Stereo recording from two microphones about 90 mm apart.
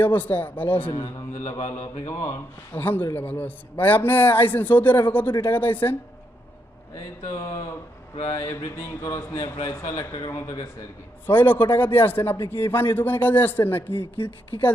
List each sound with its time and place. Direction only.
0.0 s a man's voice: 20° left (ahead or behind); by 2.3 s 35° left (ahead or behind)
2.7 s a man's voice: 25° left (ahead or behind)
7.3 s speech: 40° left (ahead or behind)
11.3 s a man's voice: 20° left (ahead or behind)